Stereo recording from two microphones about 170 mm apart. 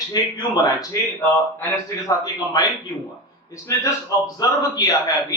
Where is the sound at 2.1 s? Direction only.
25° left (ahead or behind).